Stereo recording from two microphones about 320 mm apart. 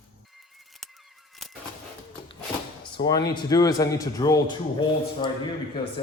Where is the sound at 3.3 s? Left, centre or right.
Centre.